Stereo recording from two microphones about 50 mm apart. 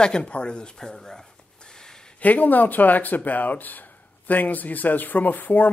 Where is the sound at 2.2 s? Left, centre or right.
Left.